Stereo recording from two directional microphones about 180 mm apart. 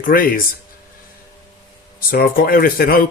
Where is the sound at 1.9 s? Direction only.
55° left (ahead or behind).